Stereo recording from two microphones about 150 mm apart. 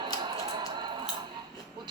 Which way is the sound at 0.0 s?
30° right (ahead or behind).